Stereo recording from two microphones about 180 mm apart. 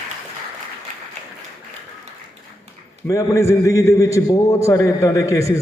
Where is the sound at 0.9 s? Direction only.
45° right (ahead or behind).